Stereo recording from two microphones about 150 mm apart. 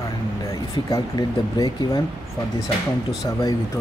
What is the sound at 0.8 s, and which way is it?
Speech, 25° left (ahead or behind).